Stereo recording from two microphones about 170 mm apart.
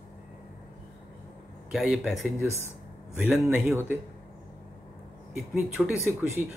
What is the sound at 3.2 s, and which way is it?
Speech, 5° right (ahead or behind).